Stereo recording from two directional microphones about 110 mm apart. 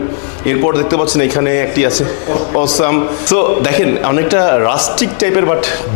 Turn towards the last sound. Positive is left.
turn(degrees=20)  # may be behind; listen again after turning